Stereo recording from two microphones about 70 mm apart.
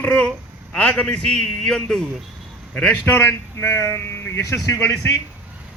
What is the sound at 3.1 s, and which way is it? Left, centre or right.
Speech, left.